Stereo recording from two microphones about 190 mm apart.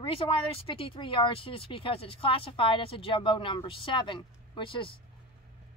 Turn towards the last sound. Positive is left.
turn(degrees=25)  # may be behind; listen again after turning